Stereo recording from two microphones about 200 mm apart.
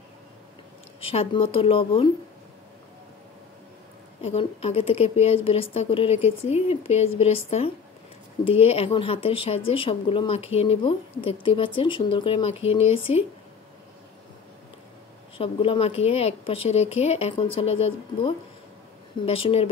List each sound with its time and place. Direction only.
1.0 s speech: 30° left (ahead or behind)
4.2 s a woman's voice: 30° left (ahead or behind)
15.3 s speech: 25° left (ahead or behind)